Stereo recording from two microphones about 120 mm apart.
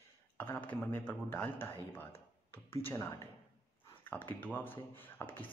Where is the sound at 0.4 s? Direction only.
15° left (ahead or behind).